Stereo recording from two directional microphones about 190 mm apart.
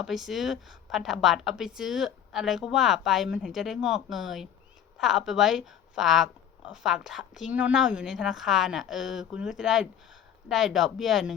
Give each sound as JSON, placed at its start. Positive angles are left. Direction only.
{"t": 0.0, "sound": "a woman's voice", "side_deg": 0}